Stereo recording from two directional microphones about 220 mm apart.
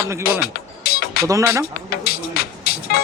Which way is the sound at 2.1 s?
45° left (ahead or behind).